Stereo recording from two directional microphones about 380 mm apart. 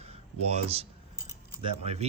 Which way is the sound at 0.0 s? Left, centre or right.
Centre.